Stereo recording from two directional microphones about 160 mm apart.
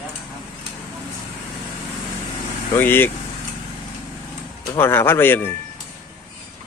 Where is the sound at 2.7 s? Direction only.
15° left (ahead or behind).